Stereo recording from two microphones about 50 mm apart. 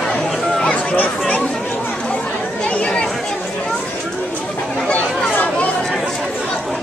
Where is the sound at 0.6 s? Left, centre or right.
Left.